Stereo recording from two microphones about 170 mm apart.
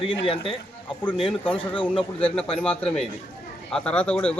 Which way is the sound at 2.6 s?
5° left (ahead or behind).